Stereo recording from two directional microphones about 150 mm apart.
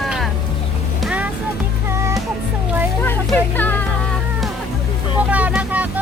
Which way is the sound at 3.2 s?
10° left (ahead or behind).